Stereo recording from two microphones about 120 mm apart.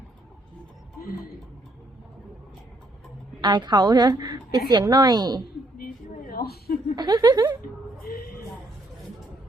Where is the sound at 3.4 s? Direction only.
40° right (ahead or behind).